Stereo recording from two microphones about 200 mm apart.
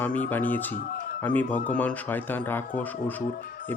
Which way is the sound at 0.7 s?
45° left (ahead or behind).